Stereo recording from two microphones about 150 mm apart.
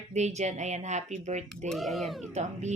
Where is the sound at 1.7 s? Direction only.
Centre (ahead or behind).